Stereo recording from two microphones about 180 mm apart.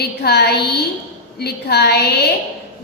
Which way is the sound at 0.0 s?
65° left (ahead or behind).